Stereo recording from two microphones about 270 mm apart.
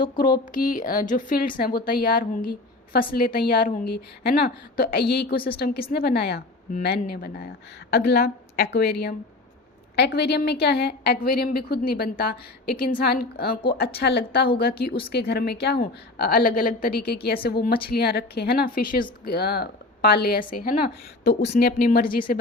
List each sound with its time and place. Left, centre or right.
0.5 s speech: left
21.6 s speech: left